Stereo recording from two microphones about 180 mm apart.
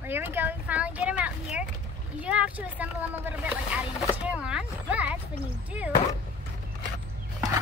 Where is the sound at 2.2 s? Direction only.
5° right (ahead or behind).